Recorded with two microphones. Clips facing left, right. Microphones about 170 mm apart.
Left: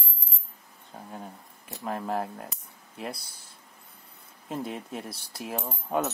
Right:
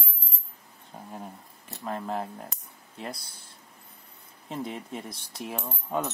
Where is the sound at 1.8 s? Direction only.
5° left (ahead or behind).